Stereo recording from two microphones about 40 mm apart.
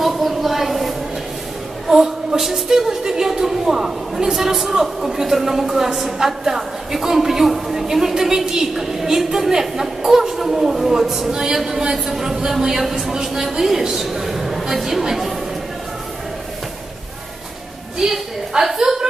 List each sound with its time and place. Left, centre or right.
0.0 s a sound: centre
1.9 s a woman's voice: centre
17.9 s a woman's voice: centre